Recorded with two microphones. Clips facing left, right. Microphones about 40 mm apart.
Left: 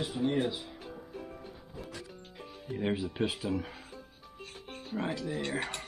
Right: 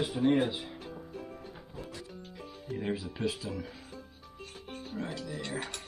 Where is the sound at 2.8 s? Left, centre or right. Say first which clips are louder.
Left 3 dB; left.